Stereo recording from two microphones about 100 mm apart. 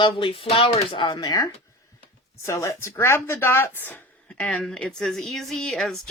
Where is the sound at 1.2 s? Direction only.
40° left (ahead or behind).